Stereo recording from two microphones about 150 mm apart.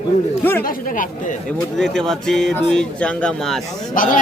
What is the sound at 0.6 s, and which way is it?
Speech, 70° left (ahead or behind).